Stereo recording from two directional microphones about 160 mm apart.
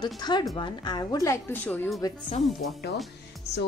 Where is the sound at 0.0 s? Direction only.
25° left (ahead or behind); by 1.9 s 10° left (ahead or behind).